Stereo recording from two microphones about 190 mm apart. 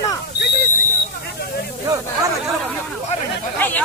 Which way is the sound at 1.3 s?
55° left (ahead or behind).